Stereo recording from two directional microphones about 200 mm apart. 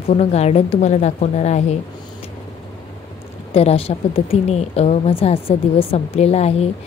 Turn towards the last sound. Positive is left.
turn(degrees=30)  # may be behind; listen again after turning